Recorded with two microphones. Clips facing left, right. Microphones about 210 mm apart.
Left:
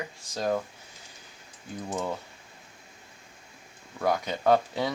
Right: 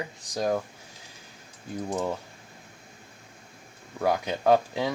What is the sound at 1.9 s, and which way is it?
Speech, 10° right (ahead or behind).